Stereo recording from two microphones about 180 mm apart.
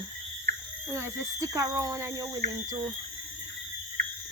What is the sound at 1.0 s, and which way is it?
Speech, 15° right (ahead or behind).